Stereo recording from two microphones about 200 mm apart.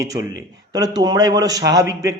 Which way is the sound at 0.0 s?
15° right (ahead or behind).